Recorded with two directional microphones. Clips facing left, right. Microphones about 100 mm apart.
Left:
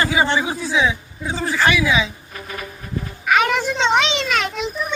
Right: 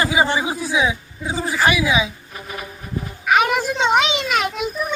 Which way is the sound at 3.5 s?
10° right (ahead or behind).